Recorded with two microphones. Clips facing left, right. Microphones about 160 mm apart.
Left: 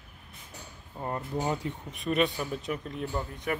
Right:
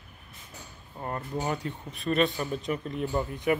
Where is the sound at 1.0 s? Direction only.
20° left (ahead or behind).